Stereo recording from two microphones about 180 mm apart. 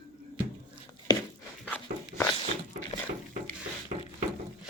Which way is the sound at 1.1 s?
25° left (ahead or behind).